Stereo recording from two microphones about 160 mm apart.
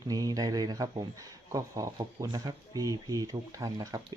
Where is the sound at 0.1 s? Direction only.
25° right (ahead or behind).